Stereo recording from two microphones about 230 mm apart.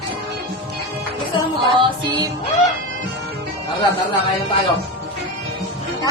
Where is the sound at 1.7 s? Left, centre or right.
Right.